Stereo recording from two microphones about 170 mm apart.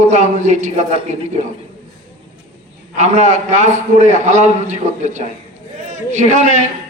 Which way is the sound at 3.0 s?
45° right (ahead or behind).